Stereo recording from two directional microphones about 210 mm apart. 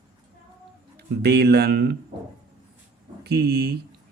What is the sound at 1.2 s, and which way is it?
Speech, 50° right (ahead or behind).